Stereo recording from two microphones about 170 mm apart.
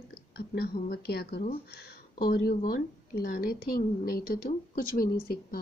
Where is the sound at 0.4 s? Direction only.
65° left (ahead or behind).